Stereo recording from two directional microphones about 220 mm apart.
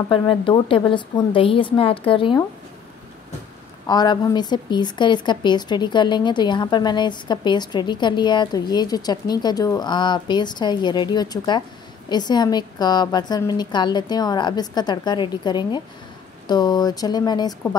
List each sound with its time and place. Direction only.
0.1 s speech: 25° left (ahead or behind)
3.8 s speech: 20° left (ahead or behind)